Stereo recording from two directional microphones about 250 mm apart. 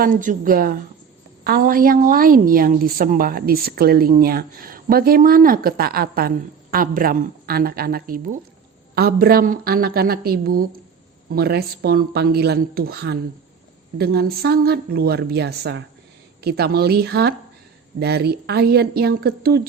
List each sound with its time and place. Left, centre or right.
0.0 s a woman's voice: right